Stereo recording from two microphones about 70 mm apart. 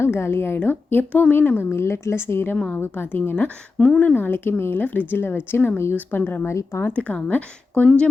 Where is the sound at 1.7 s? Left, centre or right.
Left.